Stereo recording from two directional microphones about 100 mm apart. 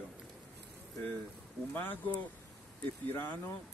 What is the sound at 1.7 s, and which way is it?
Speech, 15° left (ahead or behind).